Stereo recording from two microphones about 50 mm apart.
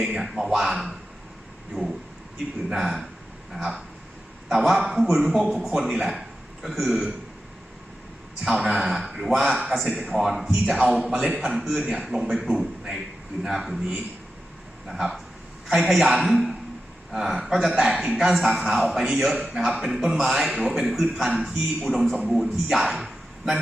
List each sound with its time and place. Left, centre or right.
0.2 s a man's voice: centre
8.7 s a man's voice: centre
23.0 s a sound: centre